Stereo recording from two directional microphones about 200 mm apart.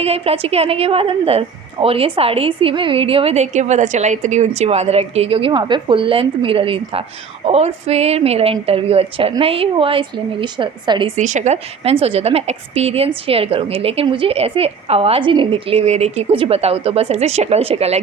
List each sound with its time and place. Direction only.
0.0 s a woman's voice: 30° right (ahead or behind)
11.2 s a woman's voice: 40° right (ahead or behind)